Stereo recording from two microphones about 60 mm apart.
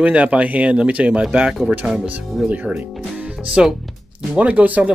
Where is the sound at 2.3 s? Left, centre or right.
Centre.